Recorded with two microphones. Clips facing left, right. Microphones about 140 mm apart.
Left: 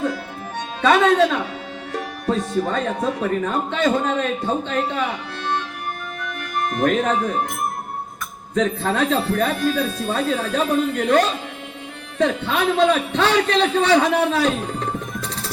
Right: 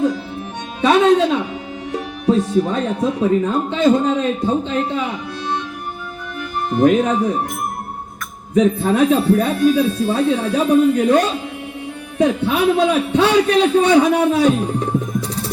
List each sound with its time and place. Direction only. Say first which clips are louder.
0.8 s speech: right 3 dB; 15° right (ahead or behind)
6.7 s speech: right 6 dB; 10° right (ahead or behind)
8.5 s a man's voice: right 6 dB; 10° right (ahead or behind)